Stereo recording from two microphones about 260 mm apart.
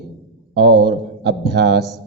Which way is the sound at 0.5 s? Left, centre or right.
Right.